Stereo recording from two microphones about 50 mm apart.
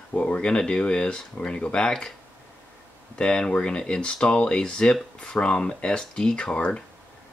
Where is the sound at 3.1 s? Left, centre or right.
Centre.